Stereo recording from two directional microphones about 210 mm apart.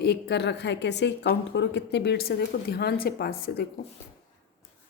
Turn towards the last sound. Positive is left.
turn(degrees=50)  # may be behind; listen again after turning